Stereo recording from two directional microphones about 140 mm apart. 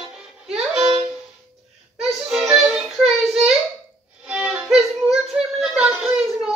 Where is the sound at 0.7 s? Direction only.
40° right (ahead or behind).